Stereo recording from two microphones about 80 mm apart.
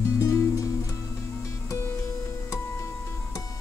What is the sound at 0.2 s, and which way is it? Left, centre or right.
Music, left.